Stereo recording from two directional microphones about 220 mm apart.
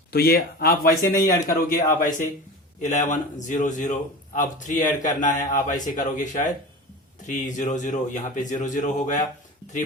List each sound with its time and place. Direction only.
0.1 s speech: 45° left (ahead or behind)
1.0 s speech: 15° left (ahead or behind)
2.0 s a man's voice: 35° left (ahead or behind)